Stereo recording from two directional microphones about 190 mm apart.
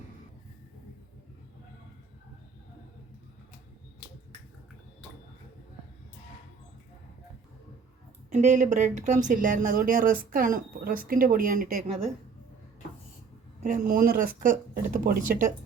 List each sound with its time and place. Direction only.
8.3 s speech: 40° right (ahead or behind)
13.6 s speech: 40° right (ahead or behind)